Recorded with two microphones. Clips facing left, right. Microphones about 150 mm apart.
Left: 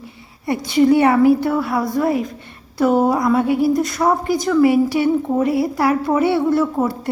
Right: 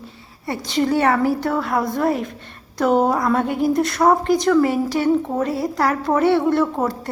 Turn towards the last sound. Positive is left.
turn(degrees=5)  # may be behind; listen again after turning